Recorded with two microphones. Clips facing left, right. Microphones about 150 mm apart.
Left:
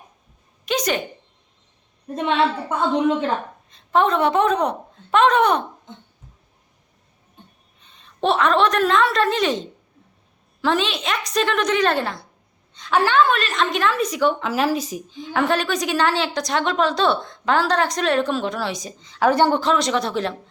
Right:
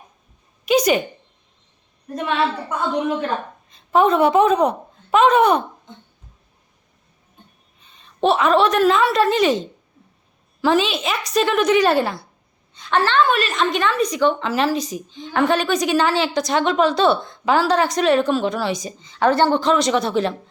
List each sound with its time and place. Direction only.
0.6 s a woman's voice: 10° right (ahead or behind)
2.1 s a woman's voice: 25° left (ahead or behind)
3.7 s a woman's voice: 5° right (ahead or behind)
7.8 s a woman's voice: centre (ahead or behind)
13.0 s speech: 10° left (ahead or behind)
13.2 s a woman's voice: 5° right (ahead or behind)
19.3 s speech: 15° left (ahead or behind)
19.6 s a woman's voice: centre (ahead or behind)